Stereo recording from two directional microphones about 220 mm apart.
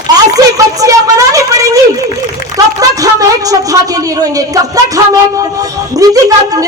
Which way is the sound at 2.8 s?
15° right (ahead or behind).